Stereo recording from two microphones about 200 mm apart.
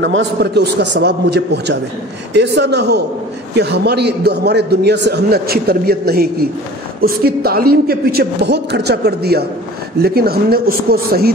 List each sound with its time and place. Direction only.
0.0 s a man's voice: 60° right (ahead or behind)